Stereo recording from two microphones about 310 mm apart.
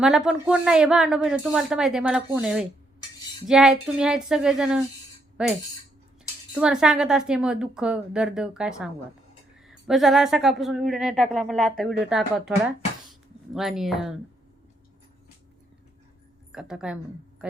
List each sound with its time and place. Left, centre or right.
0.0 s speech: centre
16.5 s speech: centre